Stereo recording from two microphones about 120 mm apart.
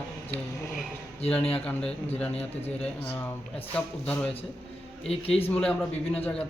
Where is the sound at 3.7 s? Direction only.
10° left (ahead or behind).